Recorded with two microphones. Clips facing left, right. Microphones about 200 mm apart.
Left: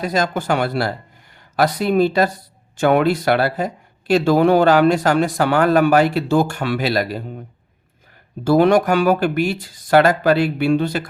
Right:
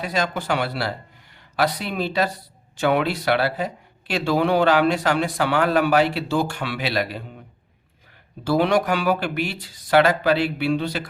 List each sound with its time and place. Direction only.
0.0 s speech: 45° left (ahead or behind)
8.4 s speech: 45° left (ahead or behind)